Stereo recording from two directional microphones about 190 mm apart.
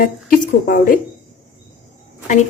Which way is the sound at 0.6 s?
50° left (ahead or behind).